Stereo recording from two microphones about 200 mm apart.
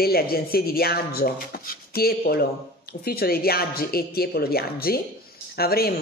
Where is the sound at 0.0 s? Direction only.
50° left (ahead or behind).